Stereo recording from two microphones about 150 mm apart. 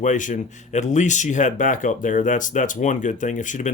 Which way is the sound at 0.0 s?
55° left (ahead or behind).